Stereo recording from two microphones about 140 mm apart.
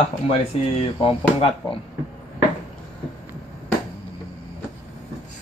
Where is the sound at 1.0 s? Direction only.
45° left (ahead or behind).